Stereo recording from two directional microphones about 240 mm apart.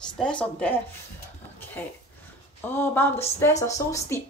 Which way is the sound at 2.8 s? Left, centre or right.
Centre.